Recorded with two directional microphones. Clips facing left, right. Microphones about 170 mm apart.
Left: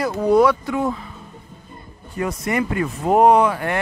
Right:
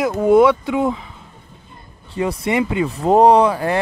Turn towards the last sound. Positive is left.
turn(degrees=-30)  # may be behind; listen again after turning